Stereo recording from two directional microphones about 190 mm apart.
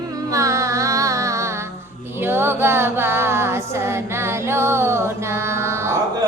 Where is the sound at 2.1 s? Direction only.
10° right (ahead or behind).